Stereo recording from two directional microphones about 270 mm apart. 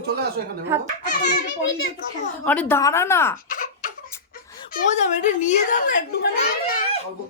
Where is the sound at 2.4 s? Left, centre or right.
Centre.